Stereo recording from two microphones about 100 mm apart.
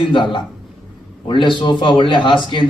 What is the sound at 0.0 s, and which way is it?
A man's voice, 55° left (ahead or behind).